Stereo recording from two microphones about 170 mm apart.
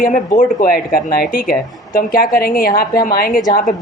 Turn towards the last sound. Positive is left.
turn(degrees=50)  # may be behind; listen again after turning